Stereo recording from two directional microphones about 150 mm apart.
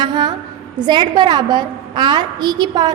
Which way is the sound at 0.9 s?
30° right (ahead or behind).